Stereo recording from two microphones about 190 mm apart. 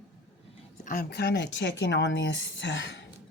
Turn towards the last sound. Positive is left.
turn(degrees=65)  # may be behind; listen again after turning